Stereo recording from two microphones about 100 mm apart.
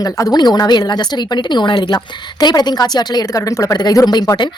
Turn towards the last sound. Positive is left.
turn(degrees=45)  # may be behind; listen again after turning